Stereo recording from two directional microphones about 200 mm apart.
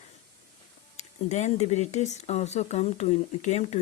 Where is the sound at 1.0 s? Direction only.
35° left (ahead or behind).